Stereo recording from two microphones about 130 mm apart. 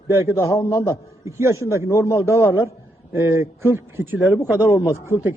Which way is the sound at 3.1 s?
20° right (ahead or behind).